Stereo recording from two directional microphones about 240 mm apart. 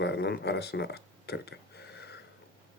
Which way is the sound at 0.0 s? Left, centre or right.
Left.